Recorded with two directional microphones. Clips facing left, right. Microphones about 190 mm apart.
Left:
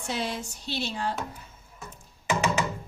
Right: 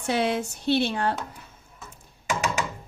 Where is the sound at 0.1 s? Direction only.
60° right (ahead or behind).